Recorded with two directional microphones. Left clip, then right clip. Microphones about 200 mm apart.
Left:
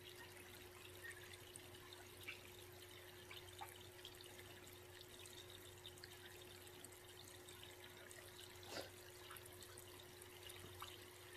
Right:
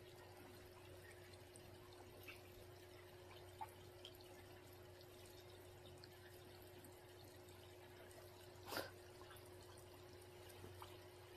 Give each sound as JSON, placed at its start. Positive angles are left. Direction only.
{"t": 8.7, "sound": "water", "side_deg": -15}